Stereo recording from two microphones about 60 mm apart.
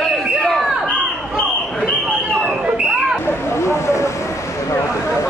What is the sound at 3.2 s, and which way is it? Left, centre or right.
Vehicle, left.